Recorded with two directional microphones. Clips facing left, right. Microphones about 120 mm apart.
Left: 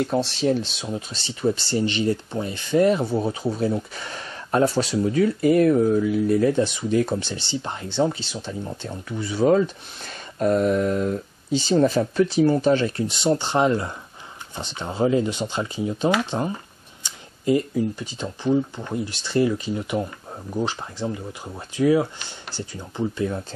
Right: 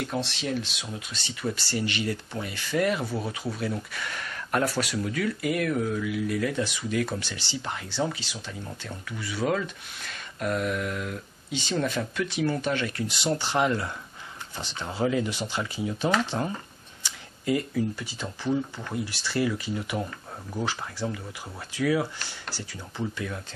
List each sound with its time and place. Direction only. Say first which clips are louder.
0.0 s speech: left 8 dB; 30° left (ahead or behind)